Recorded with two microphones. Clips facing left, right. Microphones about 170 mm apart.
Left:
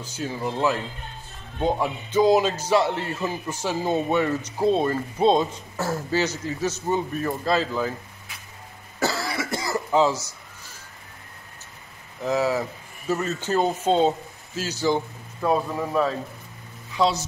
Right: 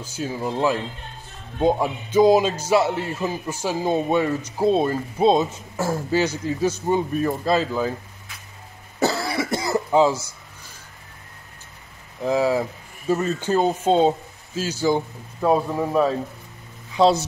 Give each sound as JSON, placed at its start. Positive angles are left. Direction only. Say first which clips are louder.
{"t": 0.0, "sound": "a man's voice", "louder": "right 2 dB", "side_deg": -10}
{"t": 9.0, "sound": "cough", "louder": "right 4 dB", "side_deg": -20}
{"t": 12.2, "sound": "a man's voice", "louder": "right 3 dB", "side_deg": -15}
{"t": 17.0, "sound": "a woman's voice", "louder": "right 5 dB", "side_deg": -25}